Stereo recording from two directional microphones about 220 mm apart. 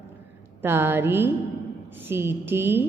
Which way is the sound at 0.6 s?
10° right (ahead or behind).